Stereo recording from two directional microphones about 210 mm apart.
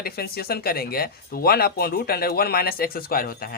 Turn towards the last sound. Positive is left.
turn(degrees=45)  # may be behind; listen again after turning